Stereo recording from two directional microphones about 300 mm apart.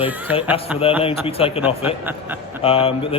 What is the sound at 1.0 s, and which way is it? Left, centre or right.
Speech, centre.